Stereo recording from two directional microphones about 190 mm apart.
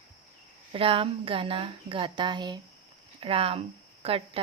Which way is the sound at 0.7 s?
30° right (ahead or behind).